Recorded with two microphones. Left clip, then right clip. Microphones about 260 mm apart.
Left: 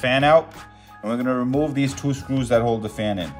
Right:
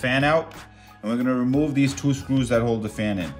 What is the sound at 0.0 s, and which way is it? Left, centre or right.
Speech, centre.